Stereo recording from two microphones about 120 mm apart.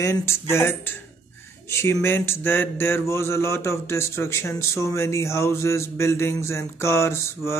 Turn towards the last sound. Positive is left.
turn(degrees=25)  # may be behind; listen again after turning